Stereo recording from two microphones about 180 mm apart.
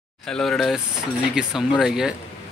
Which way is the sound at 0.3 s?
Centre (ahead or behind).